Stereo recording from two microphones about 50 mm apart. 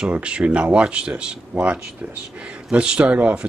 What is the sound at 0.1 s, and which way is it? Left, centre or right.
A man's voice, right.